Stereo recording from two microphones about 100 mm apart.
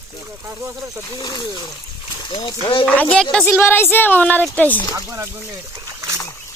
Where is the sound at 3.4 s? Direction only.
20° left (ahead or behind).